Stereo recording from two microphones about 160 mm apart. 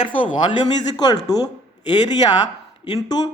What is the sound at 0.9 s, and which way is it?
Speech, 25° left (ahead or behind).